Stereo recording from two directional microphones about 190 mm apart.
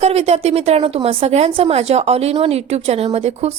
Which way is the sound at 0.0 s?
35° right (ahead or behind).